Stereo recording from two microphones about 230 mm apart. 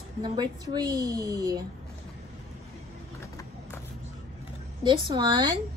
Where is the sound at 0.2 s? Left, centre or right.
Centre.